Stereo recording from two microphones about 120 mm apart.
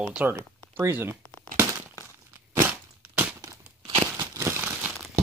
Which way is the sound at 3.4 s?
25° right (ahead or behind).